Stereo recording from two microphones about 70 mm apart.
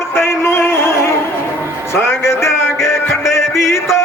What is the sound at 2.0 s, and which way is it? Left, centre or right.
Music, left.